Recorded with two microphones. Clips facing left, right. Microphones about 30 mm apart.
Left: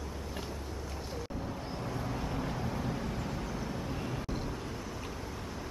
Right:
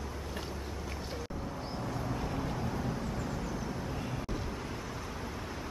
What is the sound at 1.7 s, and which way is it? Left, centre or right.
Vehicle, centre.